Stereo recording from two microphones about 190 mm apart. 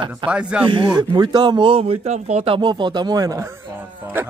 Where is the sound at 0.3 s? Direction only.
5° right (ahead or behind).